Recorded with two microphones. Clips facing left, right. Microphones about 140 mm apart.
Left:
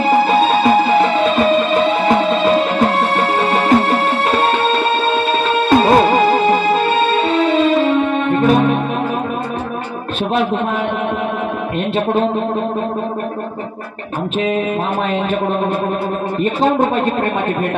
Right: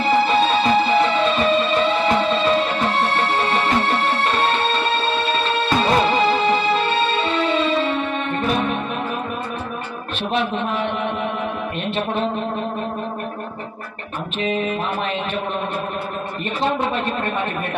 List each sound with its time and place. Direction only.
0.0 s music: 50° left (ahead or behind)
16.6 s a man's voice: 45° left (ahead or behind)